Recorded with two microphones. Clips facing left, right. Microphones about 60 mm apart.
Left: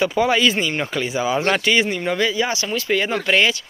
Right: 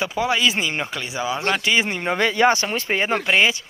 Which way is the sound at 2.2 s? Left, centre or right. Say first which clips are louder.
Right 8 dB; right.